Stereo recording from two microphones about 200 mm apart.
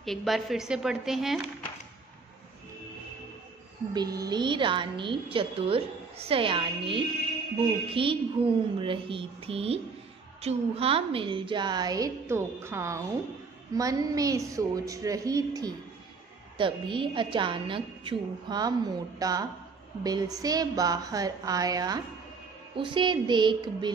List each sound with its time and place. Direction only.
0.0 s a woman's voice: centre (ahead or behind)
3.9 s a woman's voice: 20° right (ahead or behind)